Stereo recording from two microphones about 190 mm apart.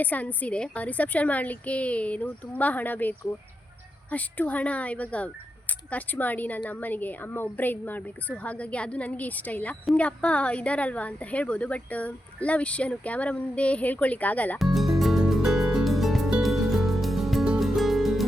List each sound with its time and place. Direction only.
0.0 s a woman's voice: 10° left (ahead or behind)